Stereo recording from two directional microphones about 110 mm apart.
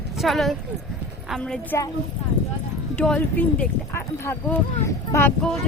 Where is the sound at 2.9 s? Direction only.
5° left (ahead or behind).